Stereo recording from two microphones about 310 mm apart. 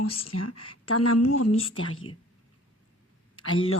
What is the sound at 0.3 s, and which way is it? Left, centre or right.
Speech, left.